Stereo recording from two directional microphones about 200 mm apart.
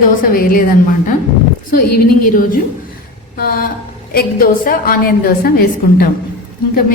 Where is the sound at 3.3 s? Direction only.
45° left (ahead or behind).